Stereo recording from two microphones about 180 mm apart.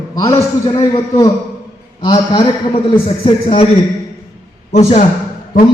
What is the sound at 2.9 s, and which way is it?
Speech, 30° left (ahead or behind).